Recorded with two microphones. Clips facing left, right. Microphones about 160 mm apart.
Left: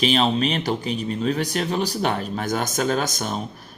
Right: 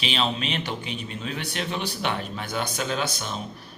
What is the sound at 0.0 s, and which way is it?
Speech, 40° left (ahead or behind).